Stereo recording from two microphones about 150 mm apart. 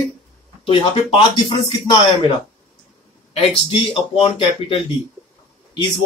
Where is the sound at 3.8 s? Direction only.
35° left (ahead or behind).